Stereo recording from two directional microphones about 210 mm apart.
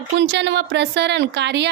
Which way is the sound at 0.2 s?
55° right (ahead or behind).